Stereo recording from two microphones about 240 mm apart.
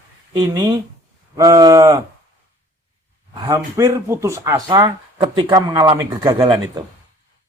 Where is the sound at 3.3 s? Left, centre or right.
Centre.